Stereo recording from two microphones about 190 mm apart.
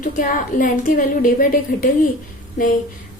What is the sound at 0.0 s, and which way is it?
A woman's voice, 45° left (ahead or behind).